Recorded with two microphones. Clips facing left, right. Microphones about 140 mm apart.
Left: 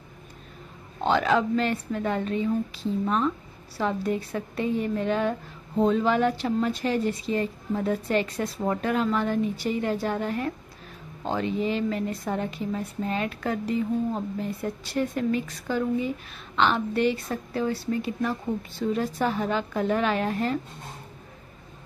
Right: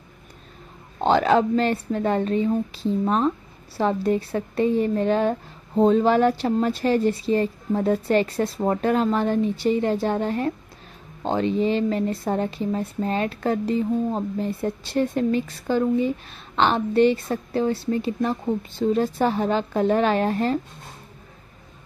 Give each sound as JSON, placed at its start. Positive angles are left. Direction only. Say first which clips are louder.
{"t": 1.0, "sound": "speech", "louder": "right 4 dB", "side_deg": -35}